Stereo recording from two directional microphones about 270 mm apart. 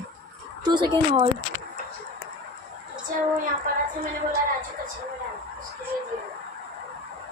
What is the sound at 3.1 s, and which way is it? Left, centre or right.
Child singing, right.